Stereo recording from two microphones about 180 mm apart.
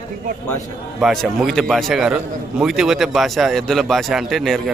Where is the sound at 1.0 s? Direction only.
Centre (ahead or behind).